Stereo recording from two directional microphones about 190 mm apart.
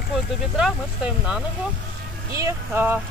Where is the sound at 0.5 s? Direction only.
5° right (ahead or behind).